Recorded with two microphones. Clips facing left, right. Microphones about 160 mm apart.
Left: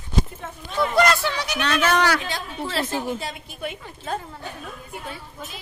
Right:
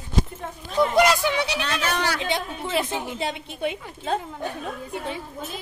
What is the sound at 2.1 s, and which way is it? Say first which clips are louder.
Speech: right 1 dB; 20° right (ahead or behind).